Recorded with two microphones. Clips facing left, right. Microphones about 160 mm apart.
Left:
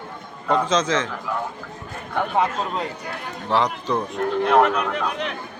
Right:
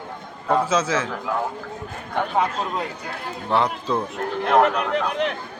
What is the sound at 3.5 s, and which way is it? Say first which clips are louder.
Speech: even; centre (ahead or behind).